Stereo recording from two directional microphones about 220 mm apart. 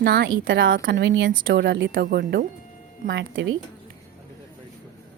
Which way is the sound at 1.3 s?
40° right (ahead or behind).